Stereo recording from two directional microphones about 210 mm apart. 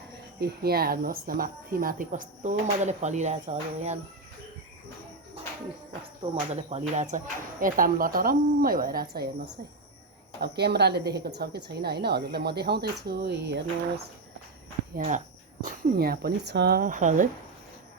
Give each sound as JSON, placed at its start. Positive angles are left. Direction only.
{"t": 0.3, "sound": "speech", "side_deg": -50}
{"t": 6.5, "sound": "a woman's voice", "side_deg": -30}
{"t": 10.4, "sound": "a woman's voice", "side_deg": -50}
{"t": 14.9, "sound": "a woman's voice", "side_deg": -35}